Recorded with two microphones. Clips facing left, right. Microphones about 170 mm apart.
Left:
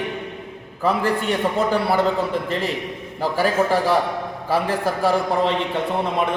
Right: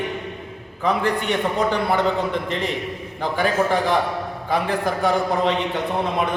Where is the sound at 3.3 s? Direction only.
5° left (ahead or behind).